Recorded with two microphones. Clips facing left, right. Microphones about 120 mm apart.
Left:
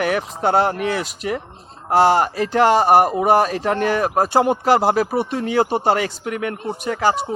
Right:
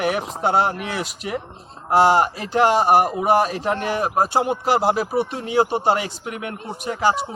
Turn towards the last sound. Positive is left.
turn(degrees=40)  # may be behind; listen again after turning